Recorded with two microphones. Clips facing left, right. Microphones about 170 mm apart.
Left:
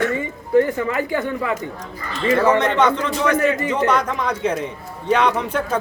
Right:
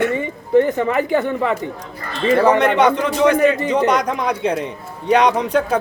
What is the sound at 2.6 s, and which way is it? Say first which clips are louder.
A man's voice: right 3 dB; 10° right (ahead or behind).